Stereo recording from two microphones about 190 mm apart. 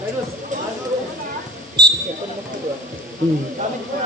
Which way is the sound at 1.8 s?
60° right (ahead or behind).